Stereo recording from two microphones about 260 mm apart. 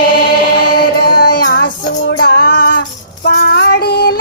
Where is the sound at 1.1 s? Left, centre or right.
Left.